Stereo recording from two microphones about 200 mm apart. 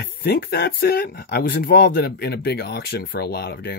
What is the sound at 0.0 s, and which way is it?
Speech, 50° left (ahead or behind).